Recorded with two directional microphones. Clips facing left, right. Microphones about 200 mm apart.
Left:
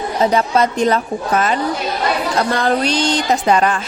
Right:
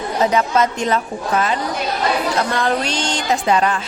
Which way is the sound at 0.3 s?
35° left (ahead or behind).